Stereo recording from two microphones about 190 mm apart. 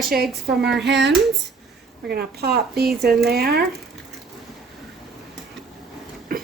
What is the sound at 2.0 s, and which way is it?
Speech, 55° right (ahead or behind).